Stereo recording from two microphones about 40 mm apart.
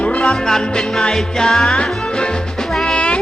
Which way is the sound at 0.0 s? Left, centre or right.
Left.